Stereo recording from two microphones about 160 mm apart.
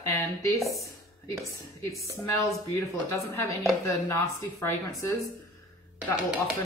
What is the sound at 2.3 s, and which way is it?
A woman's voice, 20° left (ahead or behind).